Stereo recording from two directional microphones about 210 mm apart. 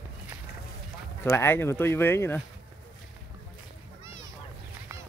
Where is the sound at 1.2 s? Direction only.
10° left (ahead or behind).